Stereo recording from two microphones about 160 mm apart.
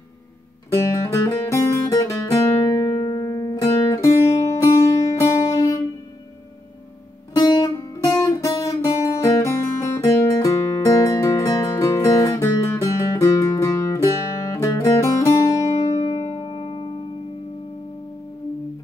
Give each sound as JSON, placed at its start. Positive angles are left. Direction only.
{"t": 0.7, "sound": "music", "side_deg": 15}
{"t": 7.3, "sound": "music", "side_deg": 25}
{"t": 8.5, "sound": "guitar", "side_deg": 20}
{"t": 15.8, "sound": "music", "side_deg": 25}